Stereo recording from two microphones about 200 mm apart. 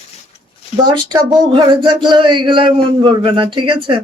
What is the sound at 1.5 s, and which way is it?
Speech, 25° right (ahead or behind).